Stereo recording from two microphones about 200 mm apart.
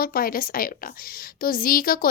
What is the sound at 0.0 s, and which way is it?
A woman's voice, 45° left (ahead or behind).